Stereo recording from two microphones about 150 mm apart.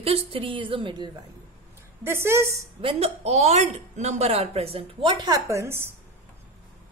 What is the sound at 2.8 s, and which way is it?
Speech, 40° right (ahead or behind).